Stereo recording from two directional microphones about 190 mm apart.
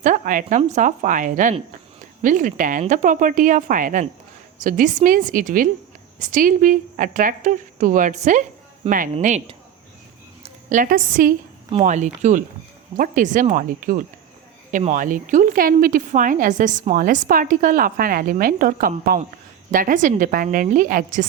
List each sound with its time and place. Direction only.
0.0 s a woman's voice: 45° right (ahead or behind)
9.1 s a woman's voice: 35° right (ahead or behind)